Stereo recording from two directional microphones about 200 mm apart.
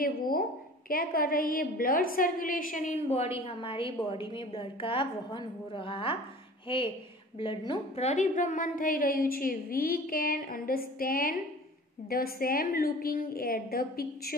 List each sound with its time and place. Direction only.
0.0 s a woman's voice: 45° left (ahead or behind)